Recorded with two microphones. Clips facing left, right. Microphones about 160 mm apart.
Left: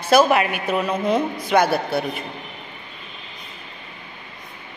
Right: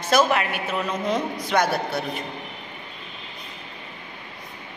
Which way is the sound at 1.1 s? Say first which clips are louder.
Left 4 dB; 55° left (ahead or behind).